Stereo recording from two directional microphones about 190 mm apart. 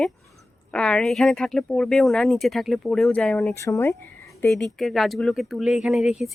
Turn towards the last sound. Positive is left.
turn(degrees=0)  # may be behind; listen again after turning